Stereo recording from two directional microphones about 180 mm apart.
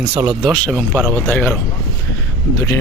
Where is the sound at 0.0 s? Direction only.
10° right (ahead or behind).